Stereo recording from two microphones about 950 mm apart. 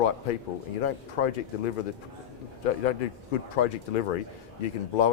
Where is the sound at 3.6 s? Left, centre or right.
Left.